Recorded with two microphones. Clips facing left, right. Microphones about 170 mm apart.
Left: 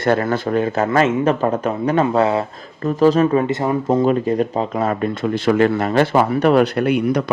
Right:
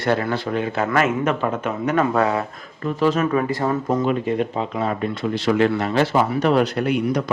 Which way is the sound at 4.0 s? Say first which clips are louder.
Left 4 dB; 40° left (ahead or behind).